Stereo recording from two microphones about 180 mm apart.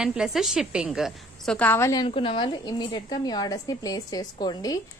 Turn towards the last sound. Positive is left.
turn(degrees=20)  # may be behind; listen again after turning